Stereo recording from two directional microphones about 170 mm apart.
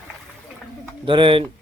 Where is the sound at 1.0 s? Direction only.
30° right (ahead or behind).